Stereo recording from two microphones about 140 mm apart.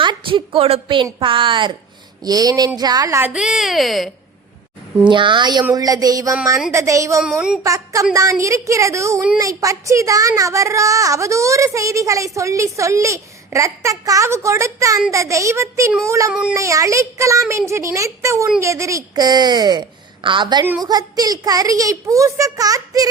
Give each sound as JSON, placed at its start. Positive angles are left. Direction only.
{"t": 0.0, "sound": "a woman's voice", "side_deg": -35}
{"t": 5.0, "sound": "a woman's voice", "side_deg": -35}
{"t": 7.2, "sound": "speech", "side_deg": -5}
{"t": 7.6, "sound": "a woman's voice", "side_deg": -25}
{"t": 16.3, "sound": "a woman's voice", "side_deg": -5}
{"t": 16.6, "sound": "a woman's voice", "side_deg": -25}